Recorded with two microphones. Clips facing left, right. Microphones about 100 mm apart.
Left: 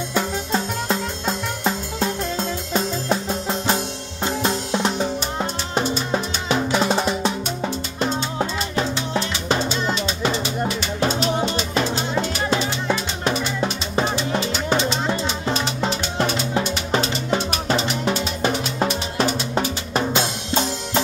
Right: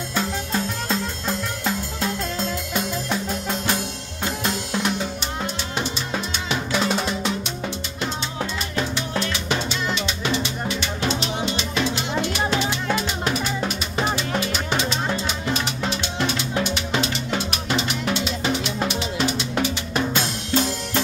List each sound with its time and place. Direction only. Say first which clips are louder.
0.1 s music: left 2 dB; 20° left (ahead or behind); by 12.0 s 40° left (ahead or behind)
14.1 s music: left 2 dB; 30° left (ahead or behind)
19.5 s drum: left 1 dB; 30° left (ahead or behind)